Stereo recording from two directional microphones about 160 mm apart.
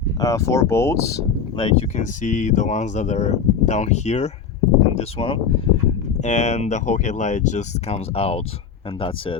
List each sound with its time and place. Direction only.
0.2 s speech: 20° left (ahead or behind)
1.5 s speech: 30° left (ahead or behind)
2.0 s speech: 50° left (ahead or behind)
6.1 s speech: 45° left (ahead or behind)